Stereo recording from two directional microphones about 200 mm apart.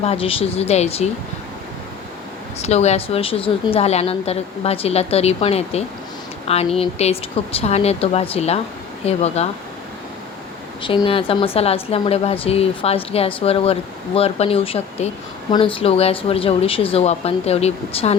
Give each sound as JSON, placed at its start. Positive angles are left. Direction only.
{"t": 0.0, "sound": "a woman's voice", "side_deg": 30}
{"t": 2.6, "sound": "a woman's voice", "side_deg": 30}
{"t": 10.8, "sound": "speech", "side_deg": 25}